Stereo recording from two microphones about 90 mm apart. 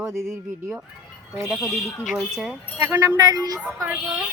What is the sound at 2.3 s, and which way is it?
Speech, 5° right (ahead or behind).